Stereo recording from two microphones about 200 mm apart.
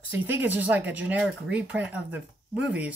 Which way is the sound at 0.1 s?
10° right (ahead or behind).